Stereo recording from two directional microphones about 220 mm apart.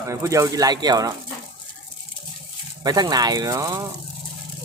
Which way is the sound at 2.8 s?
15° right (ahead or behind).